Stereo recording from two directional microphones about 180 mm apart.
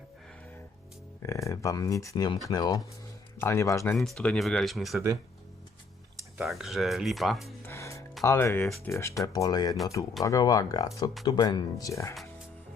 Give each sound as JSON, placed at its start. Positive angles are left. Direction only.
{"t": 1.2, "sound": "speech", "side_deg": 15}
{"t": 3.9, "sound": "speech", "side_deg": 0}
{"t": 6.4, "sound": "speech", "side_deg": 0}
{"t": 7.7, "sound": "music", "side_deg": 15}
{"t": 8.2, "sound": "speech", "side_deg": 15}